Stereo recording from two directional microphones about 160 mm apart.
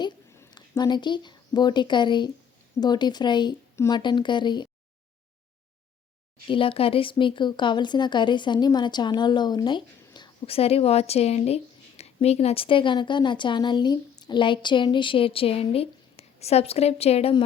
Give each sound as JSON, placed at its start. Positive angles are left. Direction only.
{"t": 0.3, "sound": "a woman's voice", "side_deg": 25}
{"t": 6.5, "sound": "speech", "side_deg": 35}
{"t": 10.4, "sound": "speech", "side_deg": 40}